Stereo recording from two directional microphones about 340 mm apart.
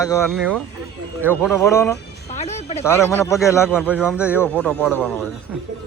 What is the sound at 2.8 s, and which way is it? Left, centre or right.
Speech, centre.